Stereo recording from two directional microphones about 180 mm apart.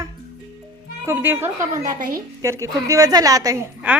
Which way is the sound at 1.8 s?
50° right (ahead or behind).